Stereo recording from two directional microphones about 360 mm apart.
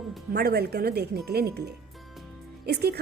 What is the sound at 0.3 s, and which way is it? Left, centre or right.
A woman's voice, right.